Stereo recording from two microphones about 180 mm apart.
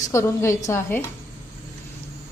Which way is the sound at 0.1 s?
15° left (ahead or behind).